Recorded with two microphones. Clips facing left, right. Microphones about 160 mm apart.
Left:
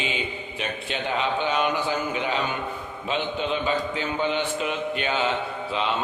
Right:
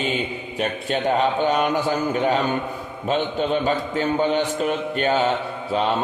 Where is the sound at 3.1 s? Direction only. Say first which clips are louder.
Right 5 dB; 40° right (ahead or behind).